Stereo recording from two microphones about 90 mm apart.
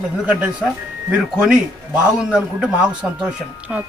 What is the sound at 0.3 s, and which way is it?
A man's voice, 15° right (ahead or behind).